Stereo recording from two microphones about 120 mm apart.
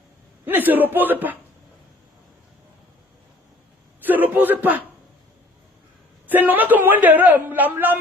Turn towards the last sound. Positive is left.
turn(degrees=-15)  # may be behind; listen again after turning